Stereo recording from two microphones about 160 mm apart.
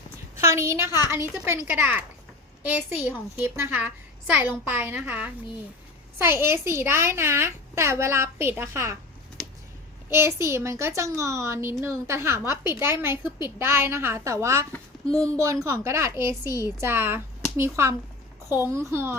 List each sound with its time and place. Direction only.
0.3 s a woman's voice: 20° right (ahead or behind)
10.1 s a woman's voice: 15° right (ahead or behind)